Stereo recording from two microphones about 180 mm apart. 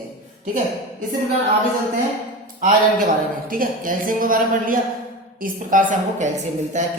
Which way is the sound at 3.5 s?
50° right (ahead or behind).